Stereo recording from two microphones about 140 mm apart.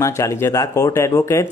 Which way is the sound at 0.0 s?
20° left (ahead or behind).